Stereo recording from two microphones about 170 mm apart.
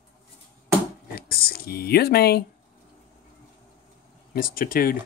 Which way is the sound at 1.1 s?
60° left (ahead or behind).